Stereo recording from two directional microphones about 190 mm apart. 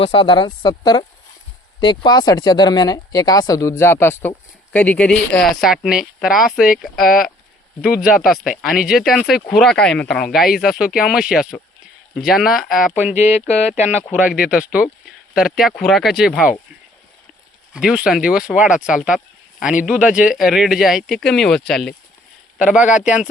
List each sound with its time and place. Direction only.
0.0 s speech: 25° left (ahead or behind); by 13.1 s 5° right (ahead or behind)
13.1 s speech: 35° left (ahead or behind)
14.1 s speech: 5° right (ahead or behind)
17.7 s speech: 5° right (ahead or behind)